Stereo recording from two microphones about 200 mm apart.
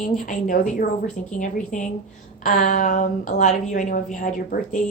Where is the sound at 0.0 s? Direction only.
40° left (ahead or behind).